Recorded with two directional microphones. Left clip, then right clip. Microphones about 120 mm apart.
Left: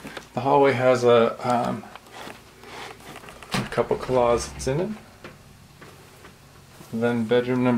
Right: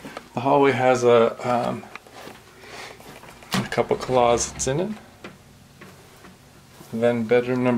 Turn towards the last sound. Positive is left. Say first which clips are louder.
# right 2 dB
turn(degrees=-10)  # may be behind; listen again after turning